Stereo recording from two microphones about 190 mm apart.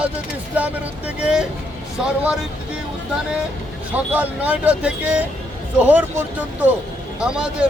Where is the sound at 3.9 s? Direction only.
10° right (ahead or behind).